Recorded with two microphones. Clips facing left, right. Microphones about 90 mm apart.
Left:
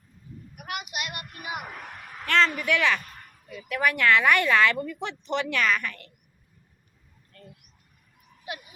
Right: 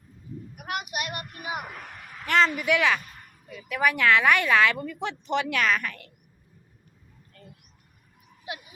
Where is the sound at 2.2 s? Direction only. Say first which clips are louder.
Right 1 dB; 10° right (ahead or behind).